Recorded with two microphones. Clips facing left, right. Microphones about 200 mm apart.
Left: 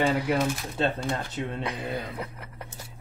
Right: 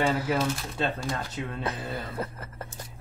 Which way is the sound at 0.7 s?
25° left (ahead or behind).